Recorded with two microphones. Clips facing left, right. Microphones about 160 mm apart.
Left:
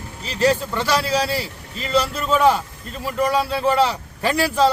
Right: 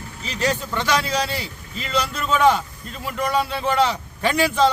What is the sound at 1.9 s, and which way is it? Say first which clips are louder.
A man's voice: left 3 dB; 5° left (ahead or behind).